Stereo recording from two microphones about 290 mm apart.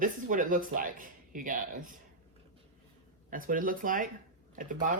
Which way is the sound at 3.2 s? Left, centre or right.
Right.